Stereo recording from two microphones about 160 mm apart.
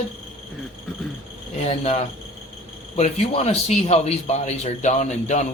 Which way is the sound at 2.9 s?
40° left (ahead or behind).